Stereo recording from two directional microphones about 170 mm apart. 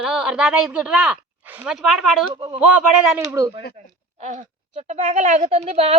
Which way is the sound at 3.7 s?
45° right (ahead or behind).